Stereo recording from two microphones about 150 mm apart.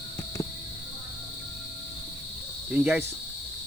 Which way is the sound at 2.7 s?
10° right (ahead or behind).